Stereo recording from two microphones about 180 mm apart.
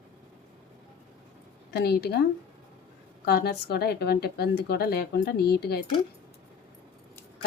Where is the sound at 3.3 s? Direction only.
60° left (ahead or behind).